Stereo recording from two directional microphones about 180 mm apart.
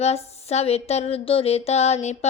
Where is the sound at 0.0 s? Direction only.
35° left (ahead or behind).